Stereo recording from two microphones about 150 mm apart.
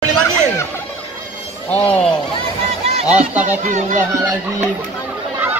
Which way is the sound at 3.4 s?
55° right (ahead or behind).